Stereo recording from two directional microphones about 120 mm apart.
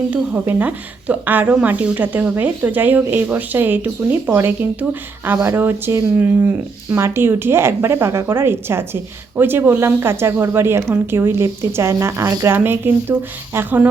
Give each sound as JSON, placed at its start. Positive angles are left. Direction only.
{"t": 0.1, "sound": "a woman's voice", "side_deg": -10}